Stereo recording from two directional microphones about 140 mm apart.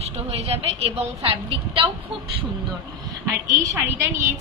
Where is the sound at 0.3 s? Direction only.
45° right (ahead or behind).